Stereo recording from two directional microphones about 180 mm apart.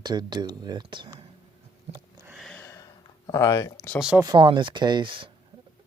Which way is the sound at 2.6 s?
15° left (ahead or behind).